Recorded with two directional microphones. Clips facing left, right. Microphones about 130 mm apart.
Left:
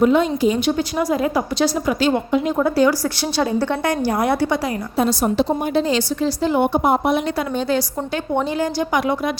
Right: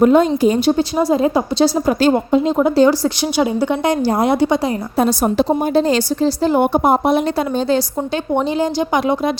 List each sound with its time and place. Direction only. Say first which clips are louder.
0.0 s a woman's voice: right 4 dB; 45° right (ahead or behind); by 2.0 s 30° right (ahead or behind)
2.0 s a woman's voice: right 4 dB; 40° right (ahead or behind)
2.4 s a woman's voice: right 4 dB; 20° right (ahead or behind)
4.9 s a woman's voice: right 2 dB; 45° right (ahead or behind); by 9.3 s 25° right (ahead or behind)